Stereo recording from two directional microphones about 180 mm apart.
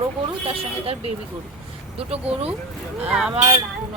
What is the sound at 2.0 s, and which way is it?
Speech, 35° right (ahead or behind).